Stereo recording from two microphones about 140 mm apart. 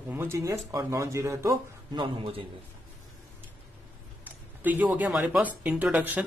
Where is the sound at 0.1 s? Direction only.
15° right (ahead or behind).